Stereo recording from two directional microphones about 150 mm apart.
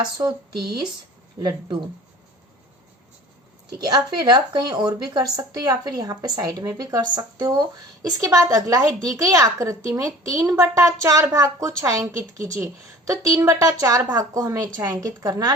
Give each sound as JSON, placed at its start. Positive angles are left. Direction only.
{"t": 0.2, "sound": "a woman's voice", "side_deg": -25}
{"t": 1.4, "sound": "a woman's voice", "side_deg": -25}
{"t": 3.8, "sound": "a woman's voice", "side_deg": -25}